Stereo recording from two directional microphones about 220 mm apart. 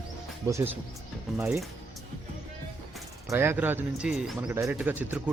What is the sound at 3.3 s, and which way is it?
Speech, 10° right (ahead or behind).